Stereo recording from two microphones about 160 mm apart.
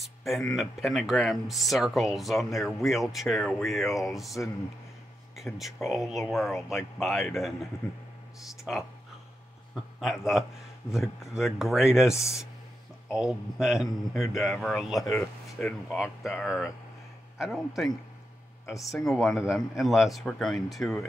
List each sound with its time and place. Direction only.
0.0 s speech: centre (ahead or behind)
8.7 s speech: centre (ahead or behind)
9.9 s speech: centre (ahead or behind)
12.1 s speech: 20° left (ahead or behind)
13.1 s speech: 5° right (ahead or behind)